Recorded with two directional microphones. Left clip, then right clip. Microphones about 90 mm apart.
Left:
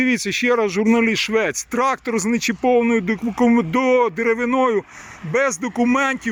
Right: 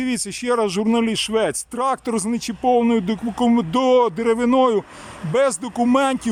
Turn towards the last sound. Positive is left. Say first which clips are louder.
# right 1 dB
turn(degrees=-25)  # may be behind; listen again after turning